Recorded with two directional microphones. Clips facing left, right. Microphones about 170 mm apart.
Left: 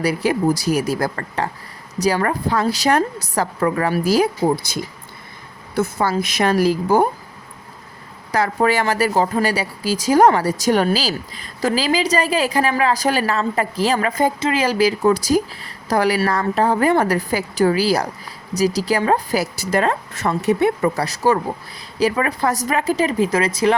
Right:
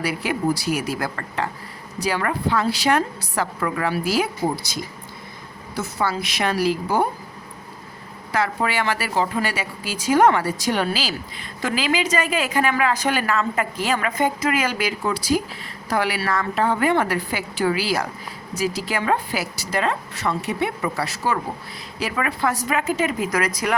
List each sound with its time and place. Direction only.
0.0 s a woman's voice: 40° left (ahead or behind)
8.3 s speech: 40° left (ahead or behind)